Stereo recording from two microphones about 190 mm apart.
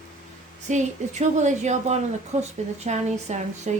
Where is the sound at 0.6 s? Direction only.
40° right (ahead or behind).